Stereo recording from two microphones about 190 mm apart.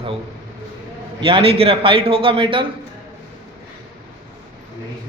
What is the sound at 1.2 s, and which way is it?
A man's voice, 30° right (ahead or behind).